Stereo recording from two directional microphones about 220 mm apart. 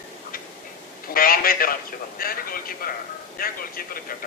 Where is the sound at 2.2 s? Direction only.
40° left (ahead or behind).